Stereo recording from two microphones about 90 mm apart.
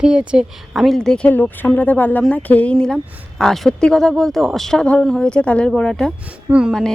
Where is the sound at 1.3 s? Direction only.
20° left (ahead or behind).